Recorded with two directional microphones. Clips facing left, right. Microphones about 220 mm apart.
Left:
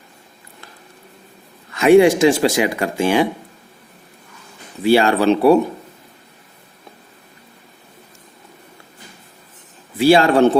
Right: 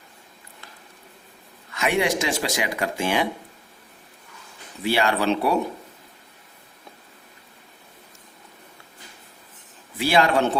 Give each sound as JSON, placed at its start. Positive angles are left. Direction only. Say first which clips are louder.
{"t": 1.7, "sound": "speech", "louder": "left 12 dB", "side_deg": 30}
{"t": 4.9, "sound": "speech", "louder": "left 8 dB", "side_deg": 30}
{"t": 10.0, "sound": "speech", "louder": "left 8 dB", "side_deg": 30}